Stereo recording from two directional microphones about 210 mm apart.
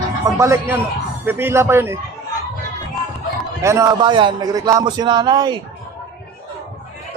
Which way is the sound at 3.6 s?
15° right (ahead or behind).